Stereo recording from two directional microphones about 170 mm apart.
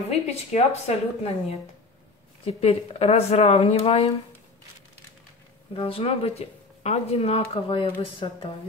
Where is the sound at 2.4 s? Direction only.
35° left (ahead or behind).